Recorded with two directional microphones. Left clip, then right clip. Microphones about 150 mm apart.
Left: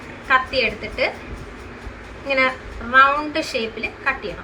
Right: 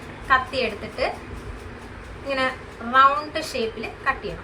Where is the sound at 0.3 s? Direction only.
Centre (ahead or behind).